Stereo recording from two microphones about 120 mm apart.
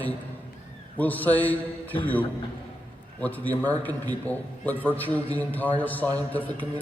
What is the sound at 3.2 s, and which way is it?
A man's voice, 15° left (ahead or behind).